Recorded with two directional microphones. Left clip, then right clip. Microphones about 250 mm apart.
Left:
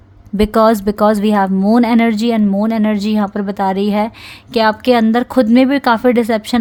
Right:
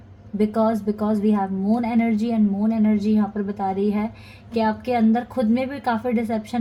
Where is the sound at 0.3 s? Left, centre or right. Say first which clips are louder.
Left 10 dB; left.